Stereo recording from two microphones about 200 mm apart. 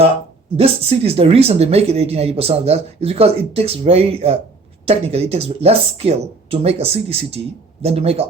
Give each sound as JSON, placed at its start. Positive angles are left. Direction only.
{"t": 0.5, "sound": "speech", "side_deg": -30}